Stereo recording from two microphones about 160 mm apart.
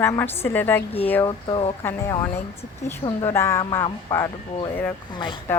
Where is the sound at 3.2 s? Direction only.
15° left (ahead or behind).